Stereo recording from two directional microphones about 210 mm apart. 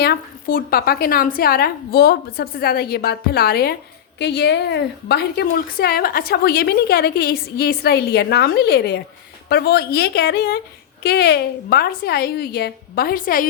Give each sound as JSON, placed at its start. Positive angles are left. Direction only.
{"t": 0.0, "sound": "a woman's voice", "side_deg": 45}